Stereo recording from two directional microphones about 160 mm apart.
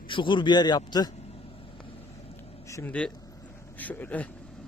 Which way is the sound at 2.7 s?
20° left (ahead or behind).